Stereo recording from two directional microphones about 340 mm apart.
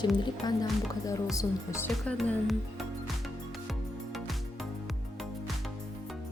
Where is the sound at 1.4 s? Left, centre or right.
Centre.